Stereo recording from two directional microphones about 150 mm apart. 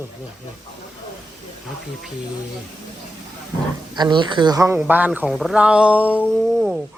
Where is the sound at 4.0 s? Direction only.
30° right (ahead or behind).